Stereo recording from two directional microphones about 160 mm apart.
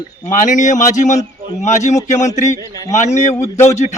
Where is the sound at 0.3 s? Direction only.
50° left (ahead or behind).